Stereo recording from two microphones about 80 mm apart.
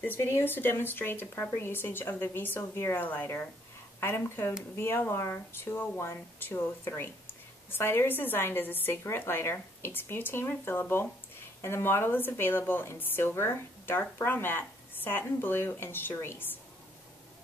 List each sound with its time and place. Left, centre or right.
0.0 s speech: left